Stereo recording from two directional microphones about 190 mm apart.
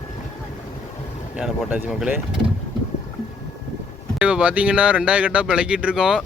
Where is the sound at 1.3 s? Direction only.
5° right (ahead or behind).